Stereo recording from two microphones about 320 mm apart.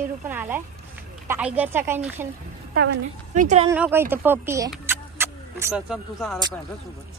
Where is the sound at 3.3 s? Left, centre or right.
Right.